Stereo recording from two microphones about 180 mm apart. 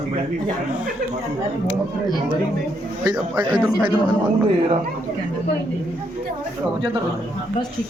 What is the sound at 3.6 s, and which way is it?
Speech, 5° right (ahead or behind).